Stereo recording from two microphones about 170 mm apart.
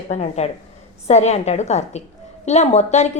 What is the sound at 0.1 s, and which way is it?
A woman's voice, 40° left (ahead or behind).